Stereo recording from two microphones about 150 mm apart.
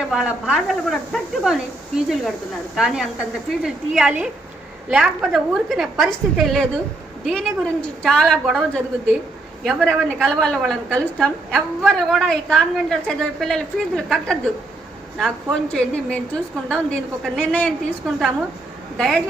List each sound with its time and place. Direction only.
0.1 s a woman's voice: 5° right (ahead or behind)
2.7 s a woman's voice: 5° right (ahead or behind)